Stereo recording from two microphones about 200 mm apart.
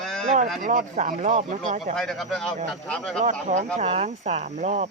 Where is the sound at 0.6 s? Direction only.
40° right (ahead or behind).